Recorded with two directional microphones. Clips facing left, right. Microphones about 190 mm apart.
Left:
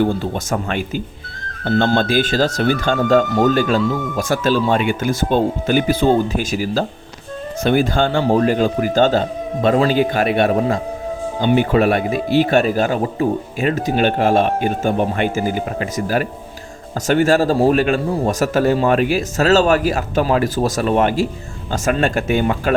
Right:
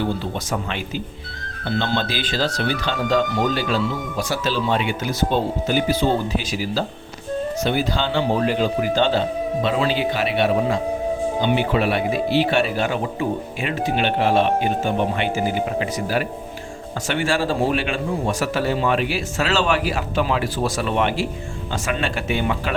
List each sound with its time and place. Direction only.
0.0 s speech: 50° left (ahead or behind)